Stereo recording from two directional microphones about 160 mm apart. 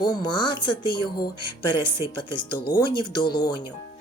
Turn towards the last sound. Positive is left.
turn(degrees=30)  # may be behind; listen again after turning